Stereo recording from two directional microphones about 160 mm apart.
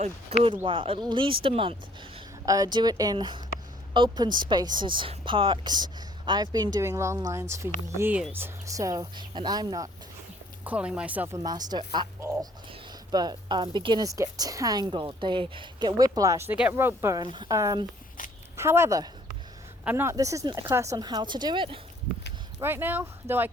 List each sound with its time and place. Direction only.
0.0 s a woman's voice: 35° right (ahead or behind)
10.6 s speech: 10° right (ahead or behind)
11.4 s a woman's voice: 25° right (ahead or behind)
13.1 s a woman's voice: 25° right (ahead or behind)
18.2 s a sound: 55° left (ahead or behind)
18.5 s a woman's voice: 15° right (ahead or behind); by 21.8 s 30° right (ahead or behind)
22.6 s speech: 15° right (ahead or behind)